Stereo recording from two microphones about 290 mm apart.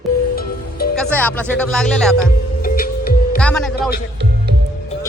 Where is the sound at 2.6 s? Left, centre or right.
Left.